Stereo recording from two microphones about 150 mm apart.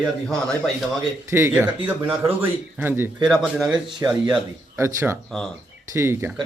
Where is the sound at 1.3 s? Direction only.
15° right (ahead or behind).